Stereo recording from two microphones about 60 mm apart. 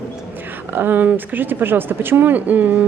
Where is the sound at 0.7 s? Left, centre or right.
Right.